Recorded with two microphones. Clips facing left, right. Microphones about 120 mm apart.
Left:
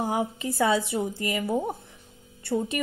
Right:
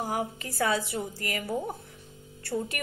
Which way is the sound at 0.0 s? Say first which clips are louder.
Left 4 dB; 20° left (ahead or behind).